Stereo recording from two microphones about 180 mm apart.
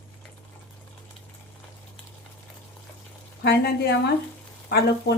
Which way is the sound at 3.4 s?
65° left (ahead or behind).